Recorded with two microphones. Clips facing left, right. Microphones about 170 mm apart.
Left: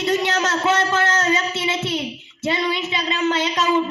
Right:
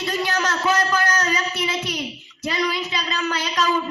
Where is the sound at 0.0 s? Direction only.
25° left (ahead or behind).